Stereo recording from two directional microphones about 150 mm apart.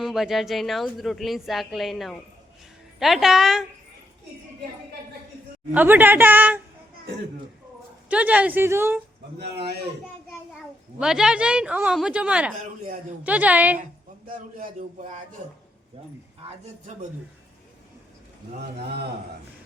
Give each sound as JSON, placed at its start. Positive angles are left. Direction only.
{"t": 0.0, "sound": "a woman's voice", "side_deg": 0}
{"t": 5.7, "sound": "speech", "side_deg": -15}
{"t": 8.1, "sound": "speech", "side_deg": -10}
{"t": 9.4, "sound": "a man's voice", "side_deg": -90}
{"t": 11.0, "sound": "speech", "side_deg": -5}